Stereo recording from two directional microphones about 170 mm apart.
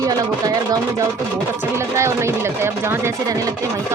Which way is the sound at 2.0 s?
15° right (ahead or behind).